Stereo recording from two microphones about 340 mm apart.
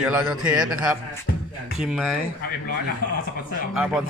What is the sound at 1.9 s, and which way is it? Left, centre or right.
Speech, centre.